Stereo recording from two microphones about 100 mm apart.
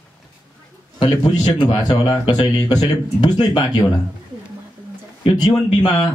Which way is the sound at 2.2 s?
55° left (ahead or behind).